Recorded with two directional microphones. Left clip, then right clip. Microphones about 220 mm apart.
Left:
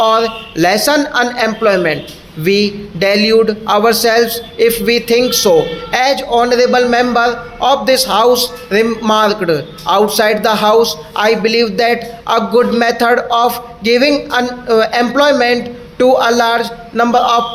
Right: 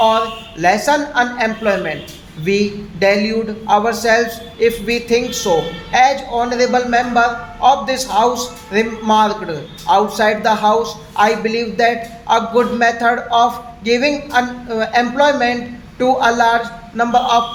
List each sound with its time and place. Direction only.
0.0 s a man's voice: 45° left (ahead or behind)